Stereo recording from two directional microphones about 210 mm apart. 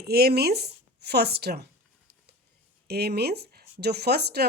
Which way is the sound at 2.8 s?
50° right (ahead or behind).